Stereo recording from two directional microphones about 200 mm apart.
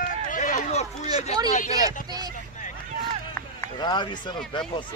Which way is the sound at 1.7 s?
20° right (ahead or behind).